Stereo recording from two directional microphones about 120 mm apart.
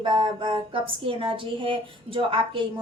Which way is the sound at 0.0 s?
45° right (ahead or behind).